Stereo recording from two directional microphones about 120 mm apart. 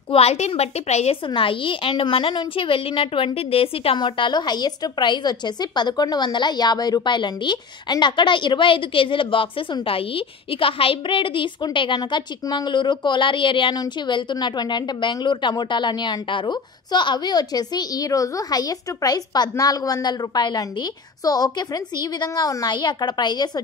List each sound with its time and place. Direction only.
0.1 s a woman's voice: 60° left (ahead or behind)
1.2 s a woman's voice: 45° left (ahead or behind)